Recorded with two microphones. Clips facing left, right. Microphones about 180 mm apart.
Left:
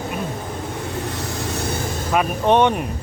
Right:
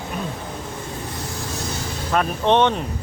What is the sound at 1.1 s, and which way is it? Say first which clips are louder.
Vehicle: left 4 dB; 70° left (ahead or behind).